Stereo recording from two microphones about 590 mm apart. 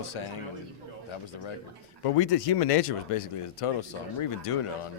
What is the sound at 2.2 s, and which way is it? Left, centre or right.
Speech, left.